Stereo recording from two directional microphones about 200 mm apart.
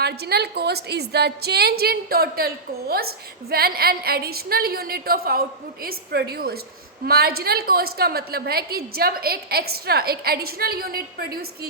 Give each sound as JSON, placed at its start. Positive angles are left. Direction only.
{"t": 0.0, "sound": "a woman's voice", "side_deg": -55}